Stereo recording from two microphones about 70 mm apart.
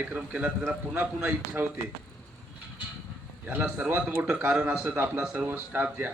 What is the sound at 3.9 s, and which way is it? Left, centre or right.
Speech, right.